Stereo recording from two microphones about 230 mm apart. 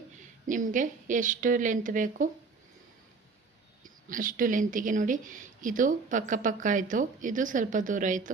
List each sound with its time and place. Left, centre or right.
0.4 s a woman's voice: right
3.8 s a woman's voice: right